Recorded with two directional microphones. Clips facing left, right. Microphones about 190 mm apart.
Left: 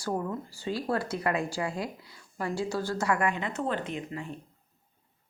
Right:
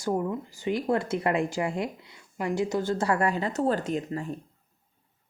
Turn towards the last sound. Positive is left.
turn(degrees=-40)  # may be behind; listen again after turning